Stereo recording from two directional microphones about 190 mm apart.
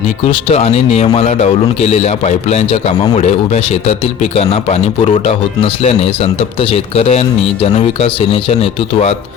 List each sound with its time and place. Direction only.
0.3 s speech: 30° left (ahead or behind)